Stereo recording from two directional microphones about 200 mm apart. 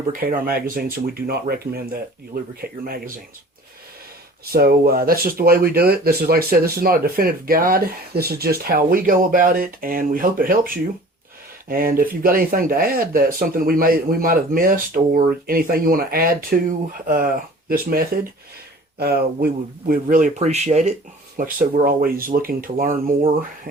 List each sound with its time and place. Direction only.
0.1 s speech: 45° right (ahead or behind)
4.5 s speech: 50° right (ahead or behind)
11.7 s speech: 45° right (ahead or behind)
21.3 s speech: 45° right (ahead or behind)